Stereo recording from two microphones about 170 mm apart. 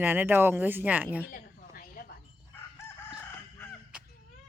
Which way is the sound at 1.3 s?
60° left (ahead or behind).